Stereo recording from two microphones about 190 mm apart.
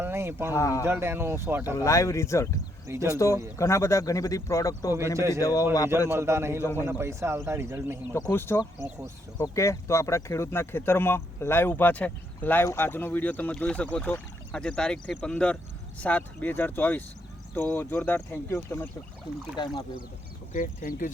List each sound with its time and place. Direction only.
0.0 s speech: 10° right (ahead or behind)
0.5 s speech: 15° left (ahead or behind)
0.9 s speech: 10° right (ahead or behind)
1.7 s speech: 15° left (ahead or behind)
2.8 s speech: 15° right (ahead or behind)
3.2 s speech: 15° left (ahead or behind)
6.1 s speech: 15° right (ahead or behind)
8.1 s speech: 10° left (ahead or behind)
19.5 s speech: 25° left (ahead or behind)
20.5 s speech: 45° left (ahead or behind)